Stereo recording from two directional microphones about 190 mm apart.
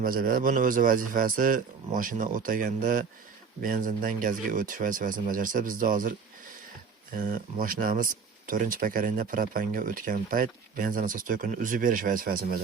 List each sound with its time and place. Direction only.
0.0 s speech: 45° right (ahead or behind)
7.2 s speech: 45° right (ahead or behind)